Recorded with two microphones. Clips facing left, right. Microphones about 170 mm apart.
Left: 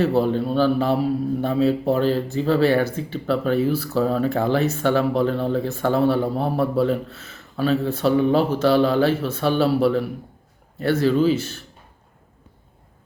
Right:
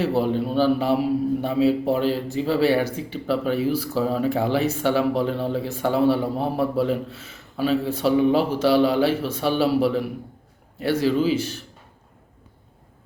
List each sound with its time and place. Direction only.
0.2 s speech: 10° right (ahead or behind)